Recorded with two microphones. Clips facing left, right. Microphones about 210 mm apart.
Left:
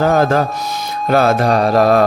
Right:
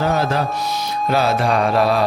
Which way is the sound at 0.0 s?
45° left (ahead or behind).